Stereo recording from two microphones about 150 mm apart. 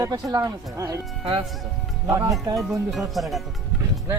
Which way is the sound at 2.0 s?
25° right (ahead or behind).